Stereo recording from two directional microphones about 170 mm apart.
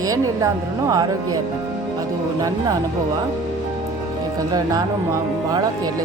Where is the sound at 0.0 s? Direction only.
20° right (ahead or behind).